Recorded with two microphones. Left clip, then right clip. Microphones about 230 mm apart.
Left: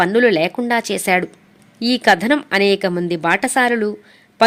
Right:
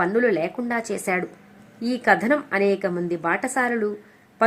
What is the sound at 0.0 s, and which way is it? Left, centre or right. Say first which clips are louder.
A woman's voice: left 7 dB; left.